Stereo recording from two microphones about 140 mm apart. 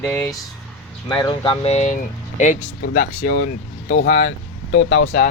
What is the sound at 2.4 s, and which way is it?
Speech, 65° left (ahead or behind).